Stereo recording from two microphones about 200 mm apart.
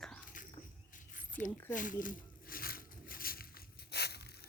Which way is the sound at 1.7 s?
40° left (ahead or behind).